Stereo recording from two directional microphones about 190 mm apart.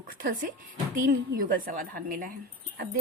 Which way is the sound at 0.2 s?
45° right (ahead or behind).